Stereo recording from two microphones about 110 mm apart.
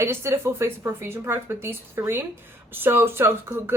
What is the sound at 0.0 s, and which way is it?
Speech, 25° right (ahead or behind).